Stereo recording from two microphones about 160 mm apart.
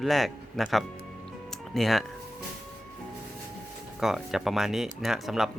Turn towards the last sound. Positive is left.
turn(degrees=0)  # may be behind; listen again after turning